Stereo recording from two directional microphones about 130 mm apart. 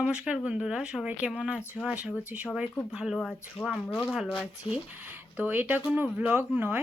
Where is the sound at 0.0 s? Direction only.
5° right (ahead or behind).